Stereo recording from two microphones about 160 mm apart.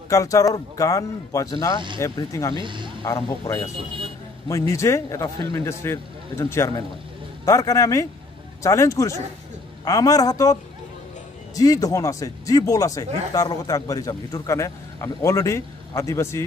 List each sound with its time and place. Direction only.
0.1 s speech: 20° left (ahead or behind)
2.5 s speech: 30° right (ahead or behind)
3.3 s speech: 20° left (ahead or behind)